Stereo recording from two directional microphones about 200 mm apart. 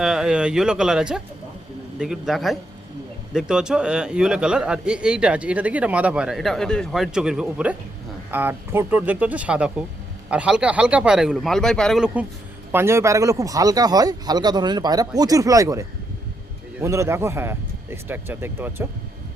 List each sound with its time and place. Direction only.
0.0 s a man's voice: centre (ahead or behind)